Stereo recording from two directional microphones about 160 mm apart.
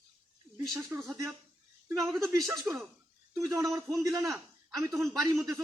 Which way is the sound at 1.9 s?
Centre (ahead or behind).